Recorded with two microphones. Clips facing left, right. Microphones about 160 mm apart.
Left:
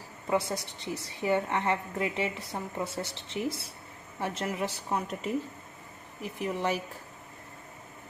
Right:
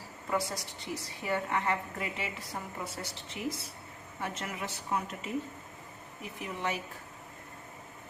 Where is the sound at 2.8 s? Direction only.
25° left (ahead or behind).